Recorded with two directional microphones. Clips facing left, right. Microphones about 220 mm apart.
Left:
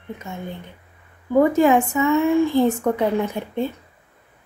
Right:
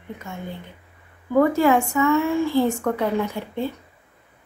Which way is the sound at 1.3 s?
20° left (ahead or behind).